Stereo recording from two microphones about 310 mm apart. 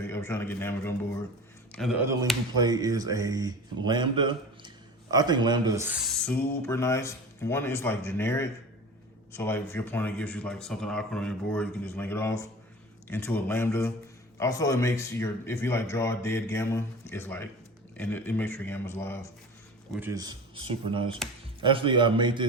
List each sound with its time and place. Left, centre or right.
0.1 s speech: centre
6.5 s speech: centre
19.9 s speech: centre